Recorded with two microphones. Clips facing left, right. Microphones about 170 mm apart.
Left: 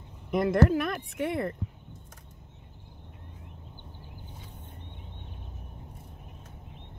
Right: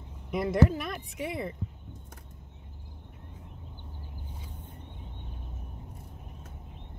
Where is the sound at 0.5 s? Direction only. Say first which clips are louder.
Left 1 dB; 55° left (ahead or behind).